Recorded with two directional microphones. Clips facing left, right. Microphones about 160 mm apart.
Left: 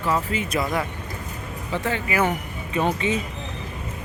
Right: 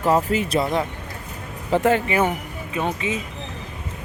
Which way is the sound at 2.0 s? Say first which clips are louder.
Right 2 dB; 25° right (ahead or behind).